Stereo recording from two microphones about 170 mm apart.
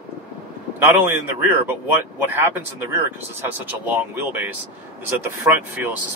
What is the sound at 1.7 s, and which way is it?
Speech, 15° right (ahead or behind).